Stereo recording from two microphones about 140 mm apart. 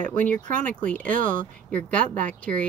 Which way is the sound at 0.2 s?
70° right (ahead or behind).